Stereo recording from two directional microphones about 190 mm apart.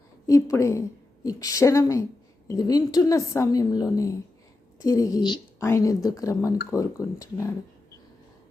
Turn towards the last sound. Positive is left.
turn(degrees=15)  # may be behind; listen again after turning